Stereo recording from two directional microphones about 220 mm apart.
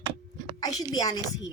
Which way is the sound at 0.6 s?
20° left (ahead or behind).